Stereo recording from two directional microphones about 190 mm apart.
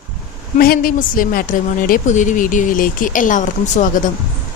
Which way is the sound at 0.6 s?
50° left (ahead or behind).